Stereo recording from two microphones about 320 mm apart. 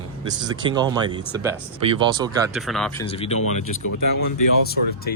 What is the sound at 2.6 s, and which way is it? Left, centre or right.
Speech, centre.